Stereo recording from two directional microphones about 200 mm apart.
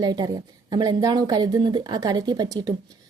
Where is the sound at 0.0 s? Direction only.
20° right (ahead or behind).